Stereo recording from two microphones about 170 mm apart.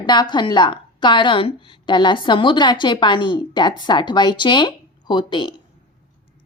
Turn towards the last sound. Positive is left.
turn(degrees=25)  # may be behind; listen again after turning